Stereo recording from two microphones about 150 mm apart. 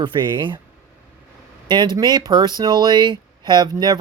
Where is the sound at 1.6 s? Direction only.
30° right (ahead or behind).